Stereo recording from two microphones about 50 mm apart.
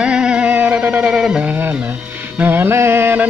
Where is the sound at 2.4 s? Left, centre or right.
Right.